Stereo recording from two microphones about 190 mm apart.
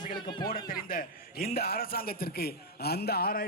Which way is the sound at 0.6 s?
50° left (ahead or behind).